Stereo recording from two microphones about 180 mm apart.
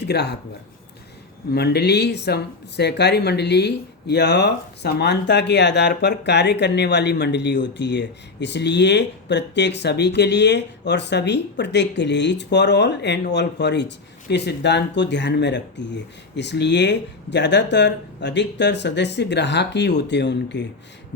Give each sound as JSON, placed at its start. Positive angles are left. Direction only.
{"t": 0.0, "sound": "speech", "side_deg": 65}
{"t": 1.5, "sound": "speech", "side_deg": 65}